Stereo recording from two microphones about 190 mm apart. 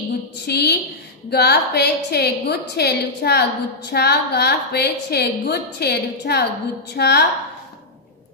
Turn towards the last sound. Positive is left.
turn(degrees=60)  # may be behind; listen again after turning